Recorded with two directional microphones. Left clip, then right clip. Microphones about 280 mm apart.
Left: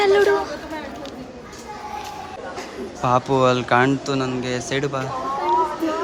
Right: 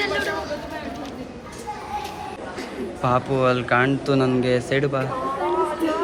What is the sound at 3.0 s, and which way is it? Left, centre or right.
Speech, centre.